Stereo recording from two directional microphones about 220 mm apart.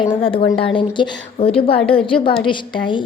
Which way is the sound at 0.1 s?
25° left (ahead or behind).